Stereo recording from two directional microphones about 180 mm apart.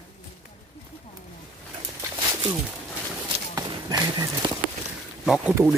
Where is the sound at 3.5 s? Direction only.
25° right (ahead or behind).